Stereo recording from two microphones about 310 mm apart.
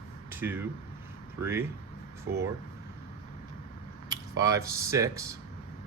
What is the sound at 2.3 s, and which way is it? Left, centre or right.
Speech, right.